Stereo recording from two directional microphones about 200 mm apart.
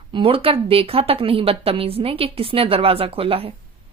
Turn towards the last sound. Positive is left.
turn(degrees=-30)  # may be behind; listen again after turning